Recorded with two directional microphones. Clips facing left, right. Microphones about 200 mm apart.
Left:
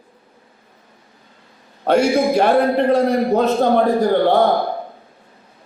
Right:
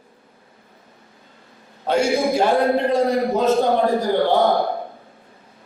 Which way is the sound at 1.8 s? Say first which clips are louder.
Left 4 dB; 60° left (ahead or behind).